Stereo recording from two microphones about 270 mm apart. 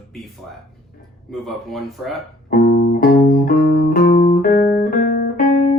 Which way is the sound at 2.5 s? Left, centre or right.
Left.